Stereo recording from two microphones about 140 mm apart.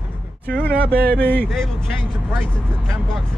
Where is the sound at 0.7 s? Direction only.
90° right.